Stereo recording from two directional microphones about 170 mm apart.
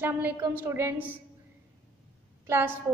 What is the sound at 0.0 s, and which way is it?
Speech, 15° right (ahead or behind).